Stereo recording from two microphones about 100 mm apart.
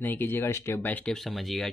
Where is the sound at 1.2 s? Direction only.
Centre (ahead or behind).